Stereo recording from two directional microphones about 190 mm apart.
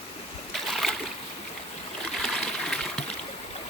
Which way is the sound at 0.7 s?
Centre (ahead or behind).